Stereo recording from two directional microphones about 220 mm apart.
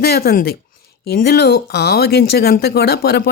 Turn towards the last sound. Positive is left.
turn(degrees=50)  # may be behind; listen again after turning